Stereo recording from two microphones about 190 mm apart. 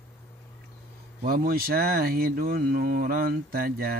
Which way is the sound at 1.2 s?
50° right (ahead or behind).